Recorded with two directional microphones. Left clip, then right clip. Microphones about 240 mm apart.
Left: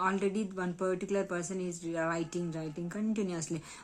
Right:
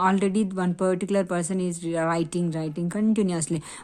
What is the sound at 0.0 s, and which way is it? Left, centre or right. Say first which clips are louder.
Speech: right 8 dB; right.